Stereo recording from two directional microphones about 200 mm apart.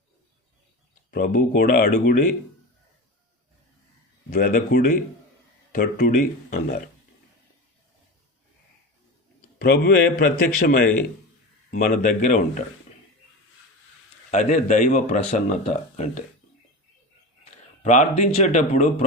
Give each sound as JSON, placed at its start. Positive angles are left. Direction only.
{"t": 1.1, "sound": "a man's voice", "side_deg": 45}
{"t": 4.3, "sound": "a man's voice", "side_deg": 45}
{"t": 9.6, "sound": "a man's voice", "side_deg": 50}
{"t": 14.3, "sound": "a man's voice", "side_deg": 35}
{"t": 18.2, "sound": "a man's voice", "side_deg": 35}